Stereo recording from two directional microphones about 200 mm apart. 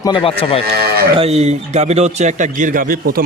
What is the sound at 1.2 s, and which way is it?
A man's voice, 30° right (ahead or behind).